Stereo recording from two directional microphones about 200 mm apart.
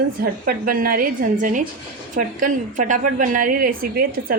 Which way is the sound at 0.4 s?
45° right (ahead or behind).